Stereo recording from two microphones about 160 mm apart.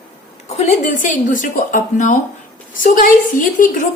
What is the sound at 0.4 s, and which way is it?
A woman's voice, 45° left (ahead or behind).